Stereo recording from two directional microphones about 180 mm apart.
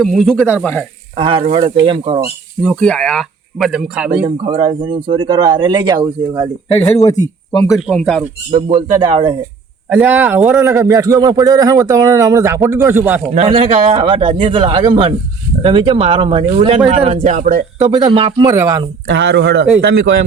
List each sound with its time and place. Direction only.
0.0 s speech: centre (ahead or behind)
1.1 s speech: 30° right (ahead or behind)
2.6 s speech: 5° left (ahead or behind)
4.4 s speech: 25° right (ahead or behind)
7.6 s speech: centre (ahead or behind)
8.5 s speech: 25° right (ahead or behind)
9.9 s a man's voice: 10° right (ahead or behind)
13.3 s speech: 30° right (ahead or behind); by 17.7 s 45° right (ahead or behind)
17.8 s speech: 25° right (ahead or behind)
19.0 s speech: 80° right